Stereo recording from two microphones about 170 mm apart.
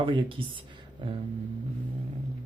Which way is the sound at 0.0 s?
30° right (ahead or behind).